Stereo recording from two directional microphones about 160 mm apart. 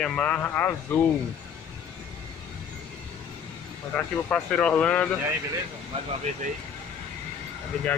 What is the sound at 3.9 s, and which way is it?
Speech, 5° left (ahead or behind).